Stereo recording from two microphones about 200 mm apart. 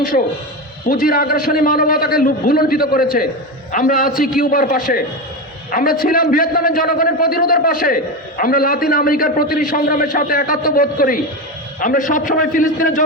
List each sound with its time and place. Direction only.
0.1 s a man's voice: 40° left (ahead or behind)